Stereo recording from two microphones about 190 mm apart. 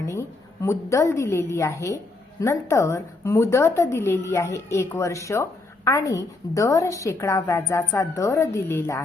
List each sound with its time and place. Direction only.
0.0 s a woman's voice: 15° left (ahead or behind)